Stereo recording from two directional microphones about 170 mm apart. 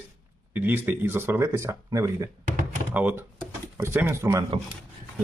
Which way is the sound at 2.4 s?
45° right (ahead or behind).